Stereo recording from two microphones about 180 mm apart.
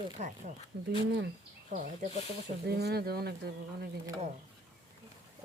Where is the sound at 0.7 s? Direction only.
65° right (ahead or behind).